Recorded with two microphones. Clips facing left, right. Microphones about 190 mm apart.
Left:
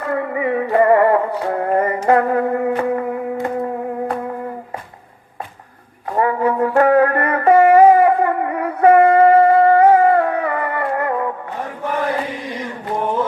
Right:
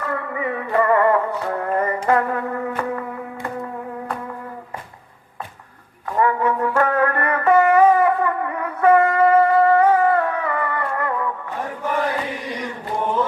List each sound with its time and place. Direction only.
0.0 s music: 25° left (ahead or behind)
6.1 s music: 30° left (ahead or behind)